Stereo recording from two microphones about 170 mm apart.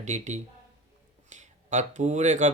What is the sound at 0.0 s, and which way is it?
Speech, 45° right (ahead or behind).